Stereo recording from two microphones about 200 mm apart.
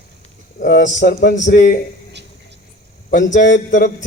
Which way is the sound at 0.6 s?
40° left (ahead or behind).